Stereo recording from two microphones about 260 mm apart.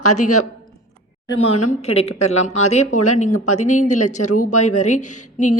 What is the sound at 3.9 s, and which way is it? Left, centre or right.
Speech, left.